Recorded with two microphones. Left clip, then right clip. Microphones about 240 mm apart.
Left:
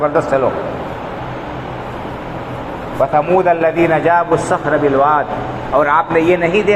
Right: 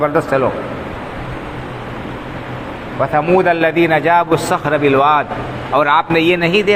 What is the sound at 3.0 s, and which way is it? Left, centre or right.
A man's voice, right.